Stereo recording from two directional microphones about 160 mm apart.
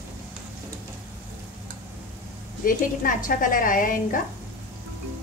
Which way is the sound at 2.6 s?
60° left (ahead or behind).